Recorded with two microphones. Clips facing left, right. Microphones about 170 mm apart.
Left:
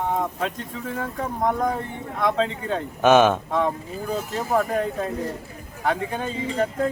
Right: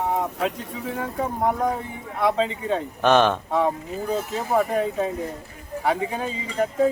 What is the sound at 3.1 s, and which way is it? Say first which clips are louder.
Speech: left 2 dB; 10° left (ahead or behind).